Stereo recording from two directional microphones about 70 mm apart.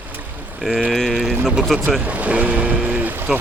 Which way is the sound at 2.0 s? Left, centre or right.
Right.